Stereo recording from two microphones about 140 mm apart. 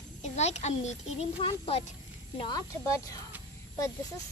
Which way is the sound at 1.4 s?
40° left (ahead or behind).